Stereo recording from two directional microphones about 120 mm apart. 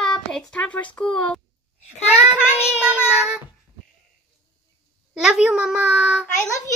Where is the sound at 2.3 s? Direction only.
10° right (ahead or behind).